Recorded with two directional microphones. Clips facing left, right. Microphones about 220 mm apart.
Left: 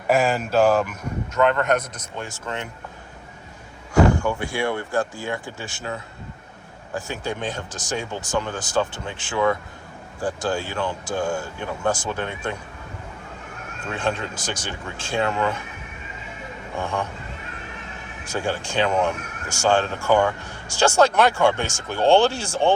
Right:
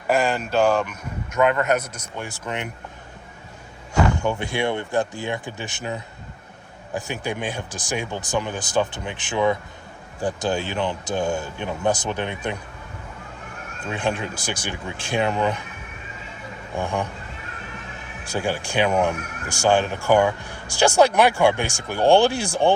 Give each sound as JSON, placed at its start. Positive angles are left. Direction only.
{"t": 0.1, "sound": "speech", "side_deg": 0}
{"t": 1.3, "sound": "speech", "side_deg": -10}
{"t": 4.2, "sound": "speech", "side_deg": -20}
{"t": 13.9, "sound": "speech", "side_deg": -15}
{"t": 16.8, "sound": "speech", "side_deg": -15}
{"t": 18.4, "sound": "speech", "side_deg": -15}